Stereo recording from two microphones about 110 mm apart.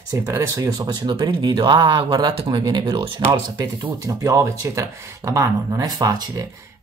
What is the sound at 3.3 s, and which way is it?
Speech, 35° right (ahead or behind).